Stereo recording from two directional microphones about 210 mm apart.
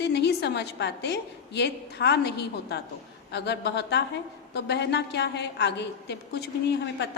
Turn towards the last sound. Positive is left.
turn(degrees=55)  # may be behind; listen again after turning